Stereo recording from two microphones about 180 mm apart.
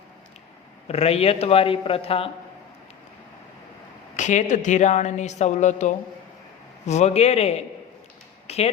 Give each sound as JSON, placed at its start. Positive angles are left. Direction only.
{"t": 0.9, "sound": "a woman's voice", "side_deg": 35}
{"t": 4.2, "sound": "a woman's voice", "side_deg": 40}
{"t": 8.4, "sound": "a sound", "side_deg": 35}